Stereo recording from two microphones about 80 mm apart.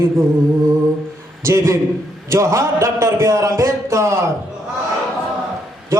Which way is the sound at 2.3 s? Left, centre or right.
Right.